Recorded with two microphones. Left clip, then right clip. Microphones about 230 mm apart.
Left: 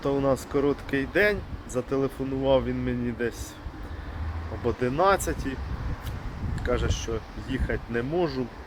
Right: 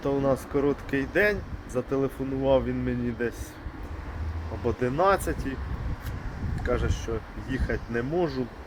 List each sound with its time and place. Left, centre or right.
0.0 s speech: centre
4.6 s speech: centre
5.2 s speech: centre
6.7 s speech: centre
7.0 s speech: centre